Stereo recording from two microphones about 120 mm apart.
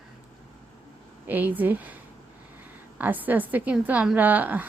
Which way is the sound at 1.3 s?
15° right (ahead or behind).